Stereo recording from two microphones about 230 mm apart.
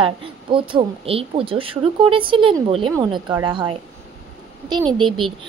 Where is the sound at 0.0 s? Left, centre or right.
Right.